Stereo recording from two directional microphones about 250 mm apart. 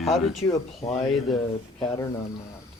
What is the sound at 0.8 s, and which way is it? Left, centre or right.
Speech, left.